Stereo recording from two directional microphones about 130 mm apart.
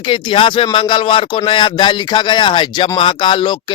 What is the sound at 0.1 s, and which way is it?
Speech, 40° left (ahead or behind).